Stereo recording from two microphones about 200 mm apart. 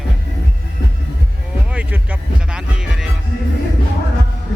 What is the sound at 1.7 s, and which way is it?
Music, 5° right (ahead or behind).